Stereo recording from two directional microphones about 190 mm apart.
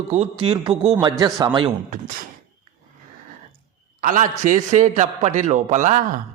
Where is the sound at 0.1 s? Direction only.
30° right (ahead or behind).